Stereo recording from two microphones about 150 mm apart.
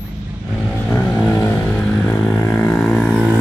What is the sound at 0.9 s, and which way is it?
Vehicle, 15° left (ahead or behind).